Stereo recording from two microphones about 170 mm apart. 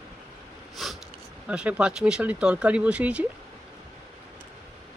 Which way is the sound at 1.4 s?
5° right (ahead or behind).